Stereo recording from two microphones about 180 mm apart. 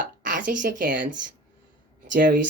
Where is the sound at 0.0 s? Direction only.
45° right (ahead or behind).